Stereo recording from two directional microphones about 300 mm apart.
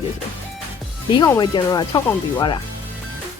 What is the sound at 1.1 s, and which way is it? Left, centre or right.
Speech, centre.